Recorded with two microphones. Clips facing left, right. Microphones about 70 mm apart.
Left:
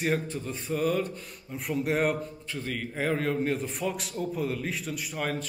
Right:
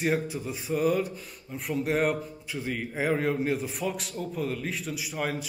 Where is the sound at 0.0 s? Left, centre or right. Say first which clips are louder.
Right 1 dB; centre.